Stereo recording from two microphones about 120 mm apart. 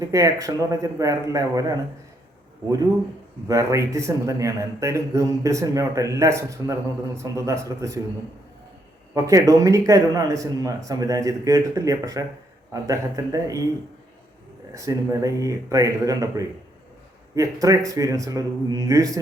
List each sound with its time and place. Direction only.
0.0 s a man's voice: 25° right (ahead or behind)
3.5 s a man's voice: 25° right (ahead or behind)
9.1 s a man's voice: 30° right (ahead or behind)
14.7 s a man's voice: 25° right (ahead or behind)